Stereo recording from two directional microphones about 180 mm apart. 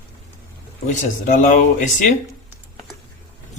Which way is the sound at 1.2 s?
45° left (ahead or behind).